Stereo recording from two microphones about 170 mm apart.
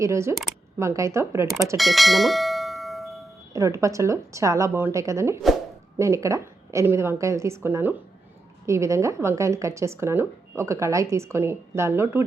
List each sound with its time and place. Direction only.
0.0 s speech: 15° right (ahead or behind)
1.8 s bell: centre (ahead or behind)
3.5 s speech: 20° right (ahead or behind)